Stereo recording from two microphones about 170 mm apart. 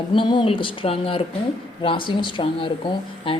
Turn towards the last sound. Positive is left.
turn(degrees=30)  # may be behind; listen again after turning